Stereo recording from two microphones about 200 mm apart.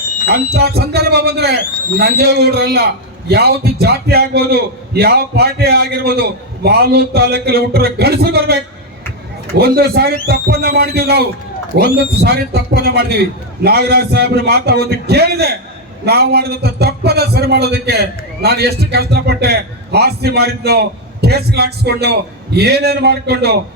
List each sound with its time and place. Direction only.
0.5 s a man's voice: 55° right (ahead or behind)